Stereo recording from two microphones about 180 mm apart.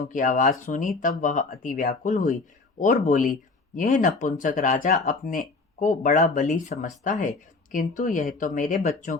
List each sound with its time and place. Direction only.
0.0 s speech: 45° left (ahead or behind)